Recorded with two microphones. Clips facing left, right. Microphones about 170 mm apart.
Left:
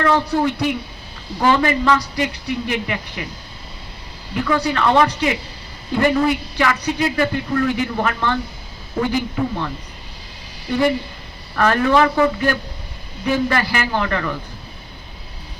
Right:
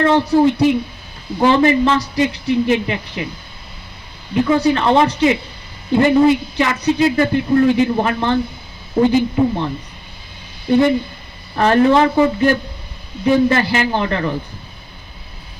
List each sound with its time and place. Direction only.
0.0 s a man's voice: 25° right (ahead or behind)
4.4 s a man's voice: 25° right (ahead or behind)
10.7 s a man's voice: 25° right (ahead or behind)